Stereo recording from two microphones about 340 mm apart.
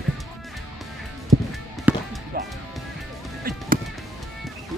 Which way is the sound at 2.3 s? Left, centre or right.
Right.